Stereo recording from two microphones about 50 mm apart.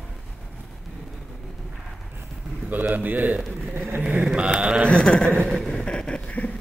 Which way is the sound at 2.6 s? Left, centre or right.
Right.